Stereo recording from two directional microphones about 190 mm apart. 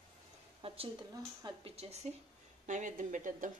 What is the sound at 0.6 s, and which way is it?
Speech, 30° right (ahead or behind).